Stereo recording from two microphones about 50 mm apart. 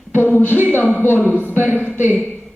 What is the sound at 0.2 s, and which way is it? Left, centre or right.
Music, left.